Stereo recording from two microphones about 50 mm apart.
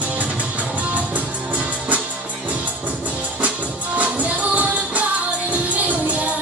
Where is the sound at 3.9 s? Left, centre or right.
Right.